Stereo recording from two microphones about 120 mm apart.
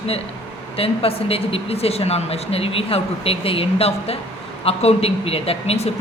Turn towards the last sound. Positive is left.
turn(degrees=60)  # may be behind; listen again after turning